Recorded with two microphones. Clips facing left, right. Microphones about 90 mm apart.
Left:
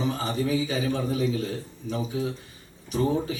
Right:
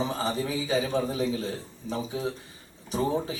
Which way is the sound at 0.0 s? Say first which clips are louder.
Left 1 dB; 30° right (ahead or behind).